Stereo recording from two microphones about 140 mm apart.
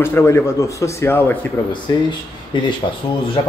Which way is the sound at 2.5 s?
35° left (ahead or behind).